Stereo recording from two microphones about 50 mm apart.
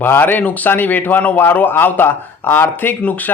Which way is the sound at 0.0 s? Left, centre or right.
Left.